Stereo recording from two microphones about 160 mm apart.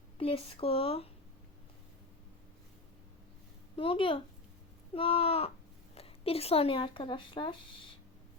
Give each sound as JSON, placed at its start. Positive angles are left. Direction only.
{"t": 0.2, "sound": "speech", "side_deg": 35}
{"t": 3.8, "sound": "speech", "side_deg": 35}